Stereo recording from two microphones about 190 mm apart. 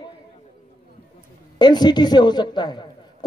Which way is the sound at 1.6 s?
20° left (ahead or behind).